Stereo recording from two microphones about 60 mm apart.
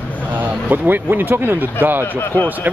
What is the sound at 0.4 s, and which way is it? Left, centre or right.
Speech, right.